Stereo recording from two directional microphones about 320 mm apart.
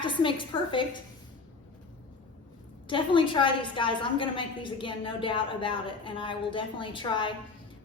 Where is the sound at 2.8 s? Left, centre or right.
Centre.